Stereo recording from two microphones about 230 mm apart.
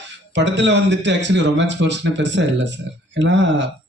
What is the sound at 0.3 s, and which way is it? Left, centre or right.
A man's voice, right.